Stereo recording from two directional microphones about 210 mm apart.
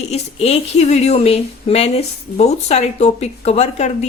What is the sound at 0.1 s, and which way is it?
Speech, 30° left (ahead or behind).